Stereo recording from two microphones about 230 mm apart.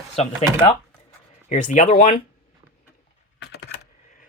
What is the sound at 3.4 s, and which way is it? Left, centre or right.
Computer keyboard, left.